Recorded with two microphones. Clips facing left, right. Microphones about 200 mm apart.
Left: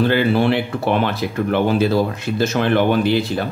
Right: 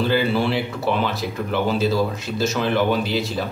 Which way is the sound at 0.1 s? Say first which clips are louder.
Left 4 dB; 60° left (ahead or behind).